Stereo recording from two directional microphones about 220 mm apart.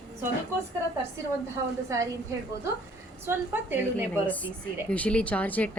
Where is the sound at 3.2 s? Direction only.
10° right (ahead or behind).